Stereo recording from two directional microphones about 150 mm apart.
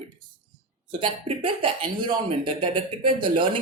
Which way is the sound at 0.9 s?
35° right (ahead or behind).